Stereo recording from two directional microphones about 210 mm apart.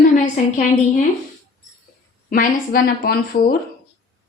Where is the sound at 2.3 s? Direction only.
45° left (ahead or behind).